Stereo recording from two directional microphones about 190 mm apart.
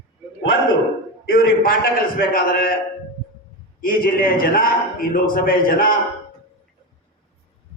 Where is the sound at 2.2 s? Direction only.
50° left (ahead or behind).